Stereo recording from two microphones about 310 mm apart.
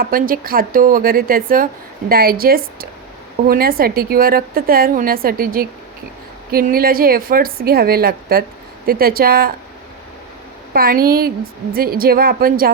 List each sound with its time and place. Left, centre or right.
0.0 s speech: right
10.8 s speech: right